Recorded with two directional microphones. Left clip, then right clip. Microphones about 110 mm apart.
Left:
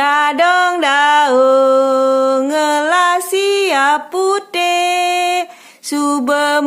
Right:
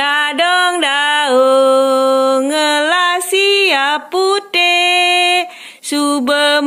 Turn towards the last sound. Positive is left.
turn(degrees=-25)  # may be behind; listen again after turning